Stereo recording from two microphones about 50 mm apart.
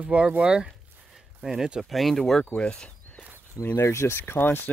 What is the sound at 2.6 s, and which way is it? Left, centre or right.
Speech, centre.